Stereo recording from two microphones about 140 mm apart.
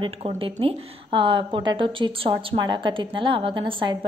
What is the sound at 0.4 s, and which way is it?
A woman's voice, 40° right (ahead or behind).